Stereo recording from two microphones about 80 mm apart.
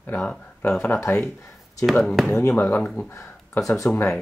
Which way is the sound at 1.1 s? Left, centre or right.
Left.